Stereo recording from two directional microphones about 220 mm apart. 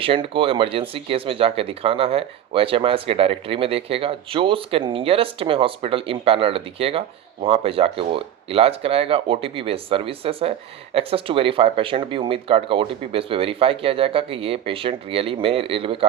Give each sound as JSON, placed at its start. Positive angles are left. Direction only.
{"t": 0.0, "sound": "speech", "side_deg": -25}